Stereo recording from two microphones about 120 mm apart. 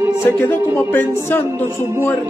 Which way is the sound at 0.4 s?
15° left (ahead or behind).